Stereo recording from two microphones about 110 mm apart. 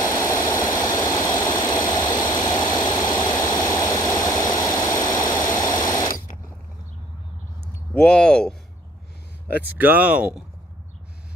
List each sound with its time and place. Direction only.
0.0 s vehicle: 25° left (ahead or behind)
7.9 s a sound: 10° left (ahead or behind)
9.7 s speech: 15° right (ahead or behind)